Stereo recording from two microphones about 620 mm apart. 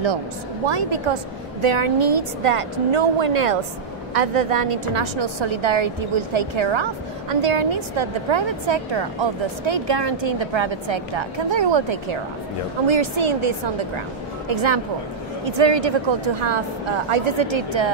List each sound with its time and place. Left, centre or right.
0.7 s a woman's voice: right